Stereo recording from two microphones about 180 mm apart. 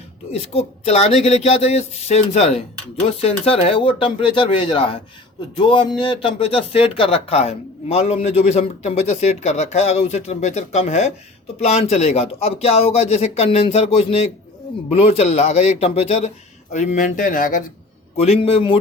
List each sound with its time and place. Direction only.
0.3 s speech: 35° left (ahead or behind)
18.2 s speech: 35° left (ahead or behind)